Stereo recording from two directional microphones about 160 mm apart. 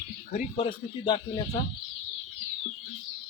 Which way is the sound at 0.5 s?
35° left (ahead or behind).